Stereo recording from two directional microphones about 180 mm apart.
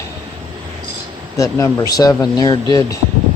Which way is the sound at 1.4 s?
15° left (ahead or behind).